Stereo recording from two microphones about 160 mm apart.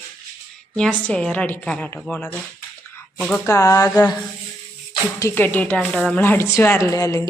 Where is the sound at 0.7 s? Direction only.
5° left (ahead or behind).